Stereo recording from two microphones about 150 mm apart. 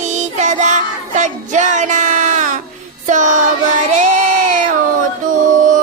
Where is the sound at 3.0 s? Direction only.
55° right (ahead or behind).